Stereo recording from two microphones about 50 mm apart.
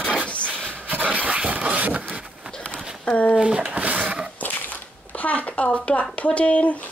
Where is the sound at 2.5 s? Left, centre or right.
Centre.